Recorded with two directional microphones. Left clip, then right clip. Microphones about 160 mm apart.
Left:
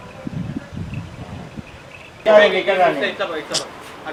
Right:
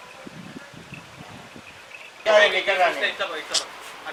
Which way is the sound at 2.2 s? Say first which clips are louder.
Left 5 dB; 15° left (ahead or behind).